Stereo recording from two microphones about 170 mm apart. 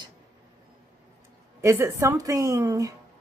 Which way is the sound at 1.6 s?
15° right (ahead or behind).